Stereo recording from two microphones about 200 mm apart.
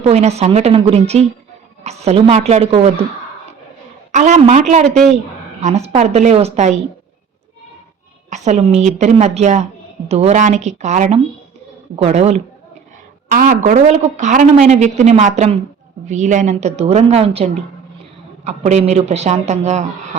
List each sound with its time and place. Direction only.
0.0 s speech: 35° right (ahead or behind)
4.1 s speech: 35° right (ahead or behind)
8.3 s speech: 35° right (ahead or behind)